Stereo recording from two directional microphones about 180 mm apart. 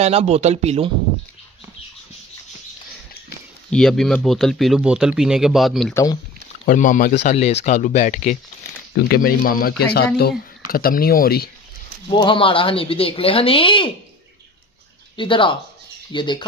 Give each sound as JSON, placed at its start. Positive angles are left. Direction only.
{"t": 0.0, "sound": "speech", "side_deg": -35}
{"t": 3.7, "sound": "speech", "side_deg": 0}
{"t": 6.7, "sound": "speech", "side_deg": 45}
{"t": 7.2, "sound": "speech", "side_deg": 35}
{"t": 8.9, "sound": "speech", "side_deg": 55}
{"t": 12.1, "sound": "speech", "side_deg": 25}
{"t": 15.1, "sound": "speech", "side_deg": 30}